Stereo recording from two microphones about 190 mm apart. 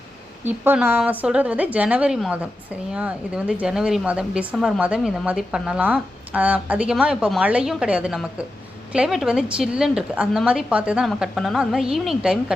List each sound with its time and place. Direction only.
0.4 s a woman's voice: 10° right (ahead or behind)